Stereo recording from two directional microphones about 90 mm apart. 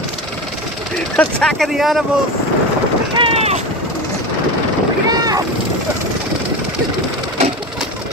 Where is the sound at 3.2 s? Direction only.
90° right.